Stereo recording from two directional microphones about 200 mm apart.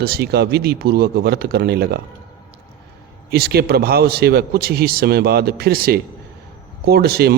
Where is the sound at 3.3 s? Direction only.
50° right (ahead or behind).